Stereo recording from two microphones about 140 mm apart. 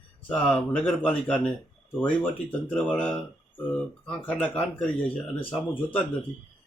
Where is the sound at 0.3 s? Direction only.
10° left (ahead or behind).